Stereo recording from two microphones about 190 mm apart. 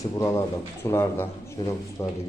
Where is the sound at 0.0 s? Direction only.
15° left (ahead or behind).